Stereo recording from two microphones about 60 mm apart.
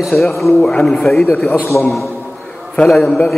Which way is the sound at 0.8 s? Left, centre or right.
Centre.